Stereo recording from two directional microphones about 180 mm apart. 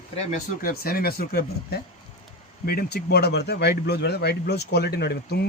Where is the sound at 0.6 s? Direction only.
55° left (ahead or behind).